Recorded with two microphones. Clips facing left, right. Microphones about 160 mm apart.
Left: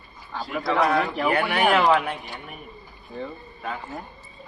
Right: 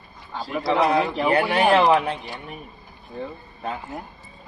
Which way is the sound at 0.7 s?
20° right (ahead or behind).